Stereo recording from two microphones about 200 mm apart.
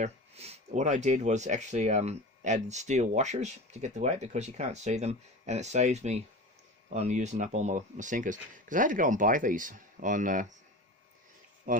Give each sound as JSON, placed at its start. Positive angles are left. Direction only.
{"t": 0.0, "sound": "speech", "side_deg": -30}
{"t": 11.7, "sound": "speech", "side_deg": -45}